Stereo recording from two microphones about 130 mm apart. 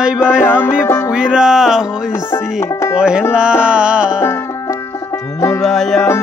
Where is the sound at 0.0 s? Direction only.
5° right (ahead or behind).